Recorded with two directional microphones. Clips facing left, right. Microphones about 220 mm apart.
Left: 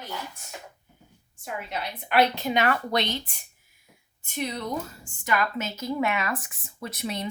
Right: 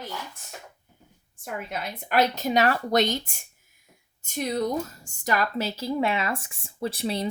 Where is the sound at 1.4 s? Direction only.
50° right (ahead or behind).